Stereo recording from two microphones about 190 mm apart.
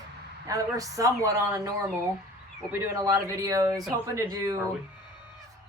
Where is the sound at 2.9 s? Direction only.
15° right (ahead or behind).